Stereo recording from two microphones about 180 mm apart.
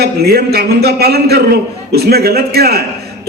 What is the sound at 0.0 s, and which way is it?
A man's voice, 60° right (ahead or behind).